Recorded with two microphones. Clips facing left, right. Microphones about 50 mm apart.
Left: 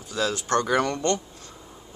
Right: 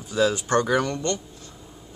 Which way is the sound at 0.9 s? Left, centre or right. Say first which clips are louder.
Left 2 dB; left.